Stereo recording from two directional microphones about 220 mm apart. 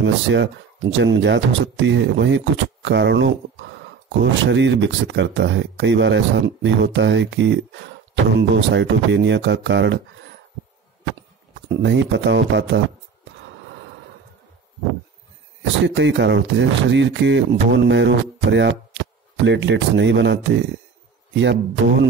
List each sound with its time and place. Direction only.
0.0 s speech: 55° right (ahead or behind)
11.7 s speech: 55° right (ahead or behind)
15.6 s speech: 55° right (ahead or behind)